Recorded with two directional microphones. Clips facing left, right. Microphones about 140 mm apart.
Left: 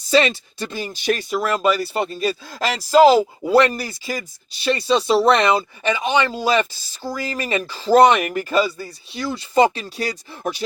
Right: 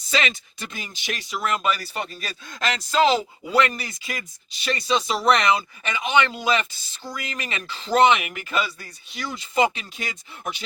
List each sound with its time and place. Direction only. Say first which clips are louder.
0.1 s speech: left 9 dB; 35° left (ahead or behind)
2.5 s speech: left 6 dB; 5° left (ahead or behind)
3.2 s speech: left 7 dB; 40° left (ahead or behind)